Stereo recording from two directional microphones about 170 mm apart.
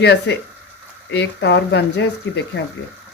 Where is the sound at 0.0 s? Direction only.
75° left (ahead or behind).